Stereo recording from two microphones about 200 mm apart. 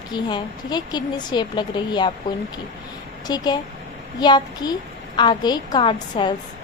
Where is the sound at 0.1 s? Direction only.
20° left (ahead or behind).